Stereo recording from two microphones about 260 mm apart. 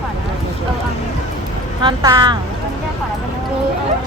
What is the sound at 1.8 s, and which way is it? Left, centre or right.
Speech, centre.